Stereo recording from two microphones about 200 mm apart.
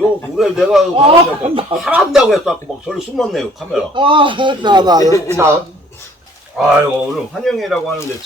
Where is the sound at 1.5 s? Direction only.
25° right (ahead or behind).